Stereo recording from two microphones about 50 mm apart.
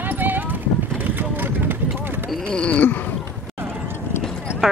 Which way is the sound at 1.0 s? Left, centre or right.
Right.